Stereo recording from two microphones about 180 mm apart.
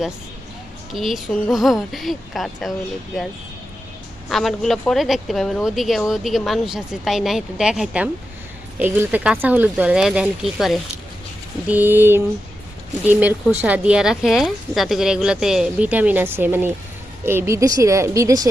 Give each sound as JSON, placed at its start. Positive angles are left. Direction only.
{"t": 0.9, "sound": "speech", "side_deg": 0}
{"t": 4.3, "sound": "speech", "side_deg": 0}